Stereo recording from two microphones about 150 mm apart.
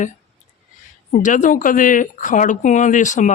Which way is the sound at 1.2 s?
60° left (ahead or behind).